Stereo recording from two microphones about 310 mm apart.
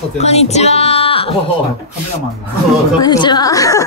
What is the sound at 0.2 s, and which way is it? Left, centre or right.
Speech, left.